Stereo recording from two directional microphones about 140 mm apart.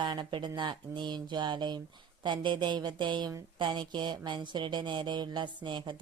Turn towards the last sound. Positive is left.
turn(degrees=-35)  # may be behind; listen again after turning